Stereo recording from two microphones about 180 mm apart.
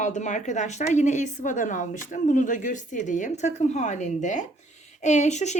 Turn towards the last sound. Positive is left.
turn(degrees=40)  # may be behind; listen again after turning